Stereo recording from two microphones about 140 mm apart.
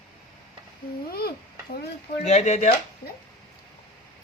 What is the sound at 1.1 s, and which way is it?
Stir, 90° left.